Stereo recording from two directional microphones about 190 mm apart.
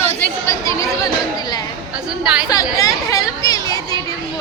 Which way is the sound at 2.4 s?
20° left (ahead or behind).